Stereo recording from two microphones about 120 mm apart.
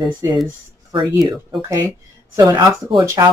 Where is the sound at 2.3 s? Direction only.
30° right (ahead or behind).